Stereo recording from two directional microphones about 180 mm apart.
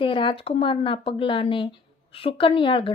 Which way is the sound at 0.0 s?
30° left (ahead or behind).